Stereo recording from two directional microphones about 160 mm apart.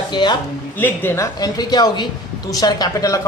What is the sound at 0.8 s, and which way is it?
Speech, 15° left (ahead or behind).